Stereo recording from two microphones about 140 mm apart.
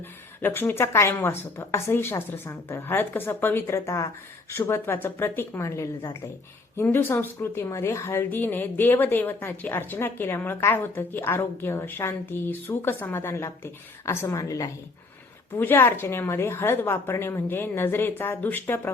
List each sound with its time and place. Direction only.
0.4 s a woman's voice: 15° left (ahead or behind)